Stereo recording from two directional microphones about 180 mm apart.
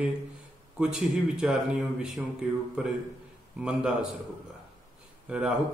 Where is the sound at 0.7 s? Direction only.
5° right (ahead or behind).